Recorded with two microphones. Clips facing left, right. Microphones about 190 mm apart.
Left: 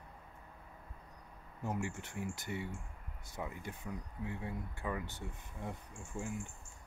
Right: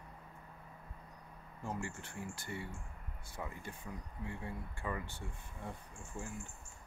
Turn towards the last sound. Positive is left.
turn(degrees=15)  # may be behind; listen again after turning